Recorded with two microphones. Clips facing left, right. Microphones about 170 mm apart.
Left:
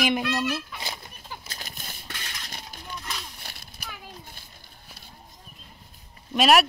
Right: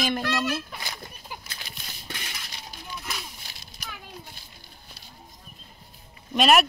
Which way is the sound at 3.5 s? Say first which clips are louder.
Left 4 dB; 60° left (ahead or behind).